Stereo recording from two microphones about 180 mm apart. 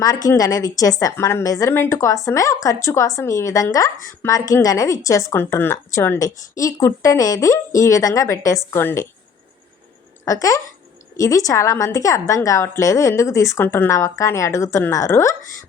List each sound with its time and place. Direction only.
0.3 s a woman's voice: 20° left (ahead or behind)
10.2 s a woman's voice: 20° left (ahead or behind)